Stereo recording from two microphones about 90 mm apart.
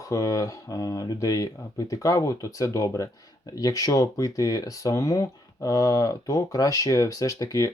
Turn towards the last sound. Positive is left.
turn(degrees=40)  # may be behind; listen again after turning